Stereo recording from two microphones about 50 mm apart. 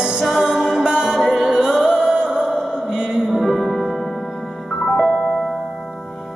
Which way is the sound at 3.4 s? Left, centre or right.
Centre.